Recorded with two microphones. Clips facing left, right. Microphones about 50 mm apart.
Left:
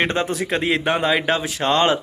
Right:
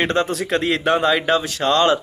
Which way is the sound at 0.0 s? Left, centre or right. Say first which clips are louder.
Right 1 dB; centre.